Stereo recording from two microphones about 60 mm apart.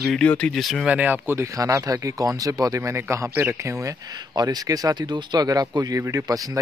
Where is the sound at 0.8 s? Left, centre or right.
Right.